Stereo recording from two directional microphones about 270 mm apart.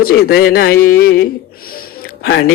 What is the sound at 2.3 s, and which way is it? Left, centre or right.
Speech, left.